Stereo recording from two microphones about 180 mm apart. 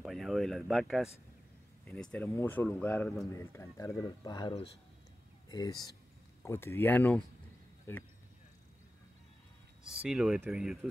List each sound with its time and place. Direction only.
0.0 s speech: centre (ahead or behind)
3.3 s speech: 15° left (ahead or behind)
10.0 s speech: 5° right (ahead or behind)